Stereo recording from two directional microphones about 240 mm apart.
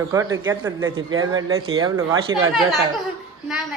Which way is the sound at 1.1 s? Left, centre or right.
Right.